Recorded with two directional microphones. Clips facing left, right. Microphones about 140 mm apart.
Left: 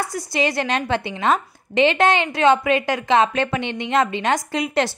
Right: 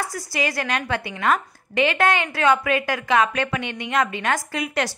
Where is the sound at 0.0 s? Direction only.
25° left (ahead or behind).